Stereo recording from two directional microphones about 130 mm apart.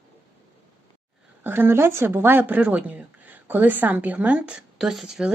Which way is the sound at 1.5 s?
15° right (ahead or behind).